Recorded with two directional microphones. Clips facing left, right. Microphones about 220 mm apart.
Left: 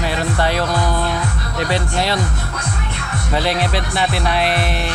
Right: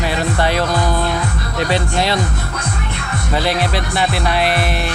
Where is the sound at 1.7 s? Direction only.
20° right (ahead or behind).